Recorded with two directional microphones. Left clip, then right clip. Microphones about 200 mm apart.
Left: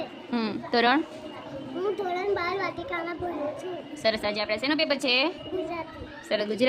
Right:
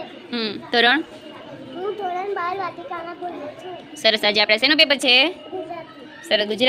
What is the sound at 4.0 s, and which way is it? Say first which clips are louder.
A woman's voice: right 9 dB; 5° right (ahead or behind).